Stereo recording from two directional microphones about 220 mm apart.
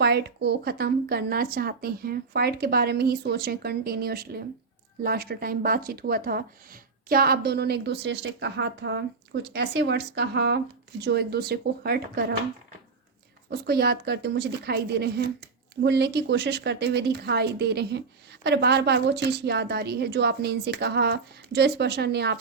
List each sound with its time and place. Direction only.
0.0 s a woman's voice: 50° right (ahead or behind)
13.5 s a woman's voice: 45° right (ahead or behind)